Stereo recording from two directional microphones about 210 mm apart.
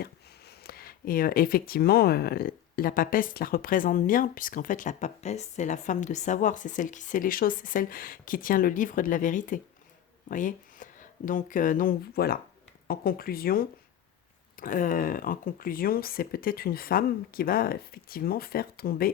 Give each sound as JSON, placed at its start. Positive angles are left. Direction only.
{"t": 0.0, "sound": "speech", "side_deg": 50}